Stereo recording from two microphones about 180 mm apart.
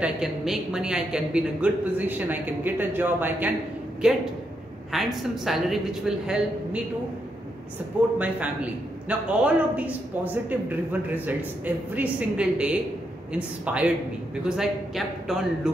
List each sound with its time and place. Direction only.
0.0 s a man's voice: 5° right (ahead or behind)
8.2 s a man's voice: 10° right (ahead or behind)